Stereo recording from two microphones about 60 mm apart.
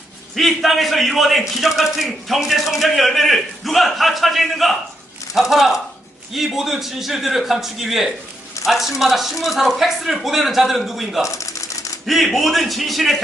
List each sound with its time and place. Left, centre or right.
0.3 s speech: centre
11.3 s typewriter: left
12.0 s speech: centre